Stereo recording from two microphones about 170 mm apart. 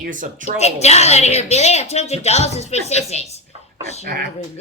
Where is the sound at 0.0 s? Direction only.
50° right (ahead or behind).